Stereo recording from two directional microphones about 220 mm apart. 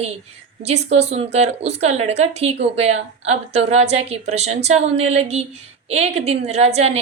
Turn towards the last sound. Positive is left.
turn(degrees=-30)  # may be behind; listen again after turning